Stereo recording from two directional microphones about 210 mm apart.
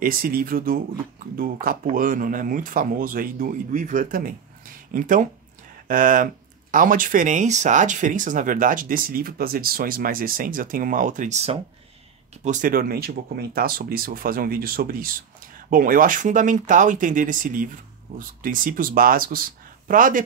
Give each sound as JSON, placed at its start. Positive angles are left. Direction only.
{"t": 0.0, "sound": "speech", "side_deg": -40}